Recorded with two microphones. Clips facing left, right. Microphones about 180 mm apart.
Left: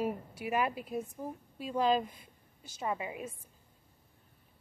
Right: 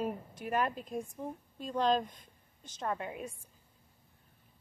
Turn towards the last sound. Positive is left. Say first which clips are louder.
# left 1 dB
turn(degrees=5)  # may be behind; listen again after turning